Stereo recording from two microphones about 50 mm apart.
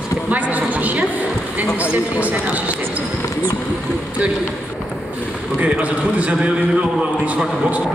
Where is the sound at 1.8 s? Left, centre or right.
Right.